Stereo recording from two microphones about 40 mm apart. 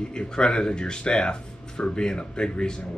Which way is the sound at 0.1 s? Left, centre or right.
Left.